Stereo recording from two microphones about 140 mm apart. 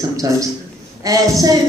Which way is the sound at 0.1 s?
25° right (ahead or behind).